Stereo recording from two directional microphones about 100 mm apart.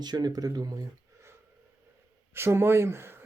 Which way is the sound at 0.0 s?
45° right (ahead or behind).